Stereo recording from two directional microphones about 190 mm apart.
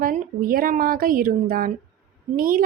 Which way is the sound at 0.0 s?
45° right (ahead or behind).